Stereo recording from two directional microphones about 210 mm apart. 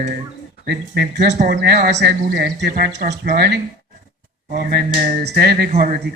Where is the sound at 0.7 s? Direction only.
55° right (ahead or behind).